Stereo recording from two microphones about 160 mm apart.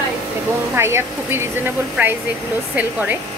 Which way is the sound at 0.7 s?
15° right (ahead or behind).